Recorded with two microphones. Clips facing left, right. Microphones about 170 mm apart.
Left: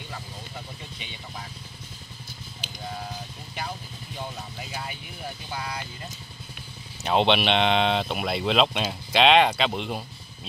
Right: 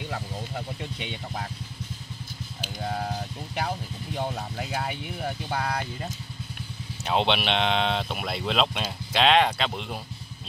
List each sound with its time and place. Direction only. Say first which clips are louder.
0.9 s speech: right 6 dB; 65° right (ahead or behind)
2.8 s vehicle: right 5 dB; 60° right (ahead or behind)
7.0 s speech: left 3 dB; centre (ahead or behind)